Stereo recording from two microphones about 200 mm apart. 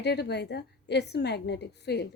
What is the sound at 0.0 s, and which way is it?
Speech, 55° left (ahead or behind).